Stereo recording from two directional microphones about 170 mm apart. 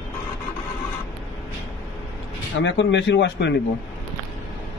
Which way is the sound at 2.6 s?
90° left.